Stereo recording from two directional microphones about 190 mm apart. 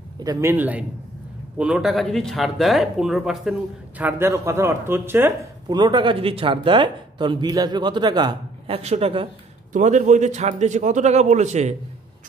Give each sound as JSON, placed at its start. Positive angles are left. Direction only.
{"t": 0.2, "sound": "a man's voice", "side_deg": -15}
{"t": 4.0, "sound": "speech", "side_deg": -15}
{"t": 9.7, "sound": "speech", "side_deg": -40}